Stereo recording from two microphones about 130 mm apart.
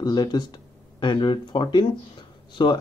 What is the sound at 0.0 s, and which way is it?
Speech, 30° left (ahead or behind).